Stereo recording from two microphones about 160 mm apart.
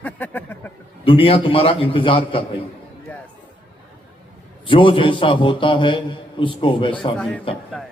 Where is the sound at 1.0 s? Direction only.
35° left (ahead or behind).